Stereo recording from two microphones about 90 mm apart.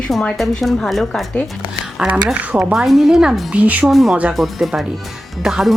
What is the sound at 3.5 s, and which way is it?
Speech, 15° right (ahead or behind).